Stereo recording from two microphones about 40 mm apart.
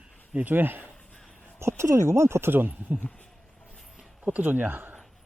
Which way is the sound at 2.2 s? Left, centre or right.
Right.